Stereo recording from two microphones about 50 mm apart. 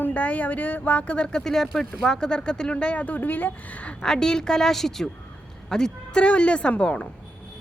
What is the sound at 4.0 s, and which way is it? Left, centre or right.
A woman's voice, centre.